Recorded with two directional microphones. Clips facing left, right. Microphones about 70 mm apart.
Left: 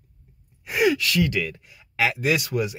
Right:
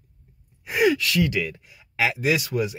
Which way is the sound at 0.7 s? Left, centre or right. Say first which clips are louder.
Right 1 dB; centre.